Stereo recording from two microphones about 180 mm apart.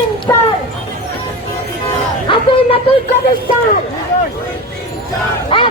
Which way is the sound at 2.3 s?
30° left (ahead or behind).